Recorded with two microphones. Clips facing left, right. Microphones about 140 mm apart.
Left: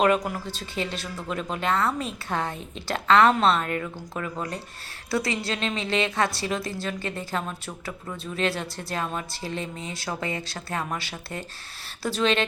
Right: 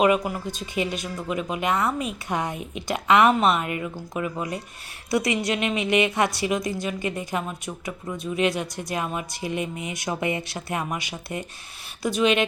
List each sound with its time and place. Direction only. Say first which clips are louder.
0.0 s speech: right 2 dB; 10° right (ahead or behind)